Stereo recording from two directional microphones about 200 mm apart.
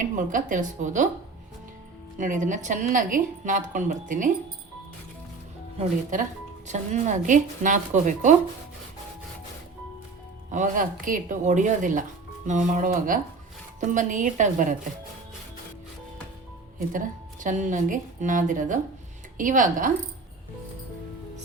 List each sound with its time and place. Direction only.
0.0 s a woman's voice: 40° right (ahead or behind)
2.1 s a woman's voice: 40° right (ahead or behind)
5.8 s a woman's voice: 40° right (ahead or behind)
10.5 s a woman's voice: 40° right (ahead or behind)
17.4 s a woman's voice: 40° right (ahead or behind)